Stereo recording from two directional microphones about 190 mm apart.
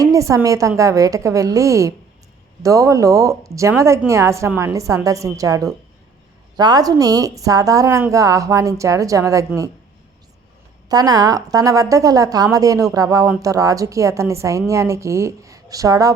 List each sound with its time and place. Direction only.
0.0 s a woman's voice: 15° right (ahead or behind)
10.8 s a woman's voice: 20° right (ahead or behind)